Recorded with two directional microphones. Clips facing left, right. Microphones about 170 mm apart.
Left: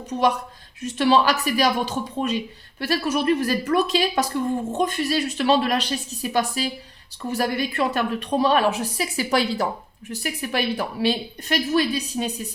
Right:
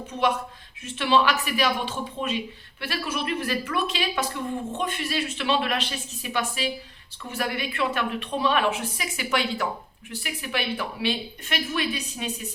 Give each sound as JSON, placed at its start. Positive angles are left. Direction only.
{"t": 0.1, "sound": "a woman's voice", "side_deg": 40}